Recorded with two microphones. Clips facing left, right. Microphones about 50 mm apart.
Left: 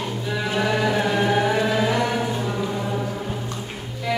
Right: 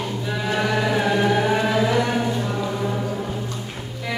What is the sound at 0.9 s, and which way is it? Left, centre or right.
Music, centre.